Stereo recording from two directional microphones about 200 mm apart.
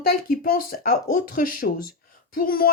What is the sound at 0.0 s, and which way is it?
Speech, 45° left (ahead or behind).